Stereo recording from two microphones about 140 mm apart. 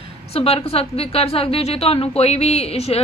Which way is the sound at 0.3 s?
45° left (ahead or behind).